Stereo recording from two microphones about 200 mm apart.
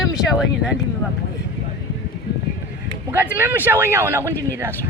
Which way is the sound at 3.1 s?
10° right (ahead or behind).